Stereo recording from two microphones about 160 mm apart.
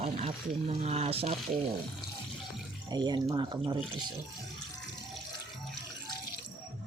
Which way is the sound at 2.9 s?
25° right (ahead or behind).